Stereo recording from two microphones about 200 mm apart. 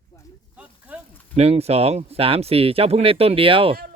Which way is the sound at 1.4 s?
30° right (ahead or behind).